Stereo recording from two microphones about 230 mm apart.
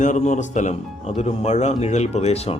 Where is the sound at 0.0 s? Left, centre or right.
Left.